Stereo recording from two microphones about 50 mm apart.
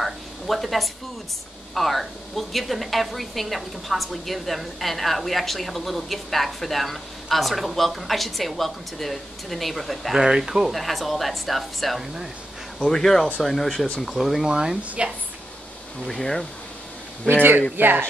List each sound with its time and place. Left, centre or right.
0.0 s a sound: centre
1.7 s a woman's voice: centre
10.2 s a woman's voice: centre
14.4 s speech: centre
16.1 s speech: centre
17.4 s speech: right